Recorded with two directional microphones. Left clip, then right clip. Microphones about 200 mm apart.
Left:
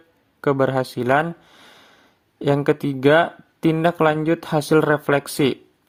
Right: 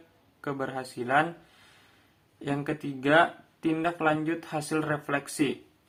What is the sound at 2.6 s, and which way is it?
Speech, 55° left (ahead or behind).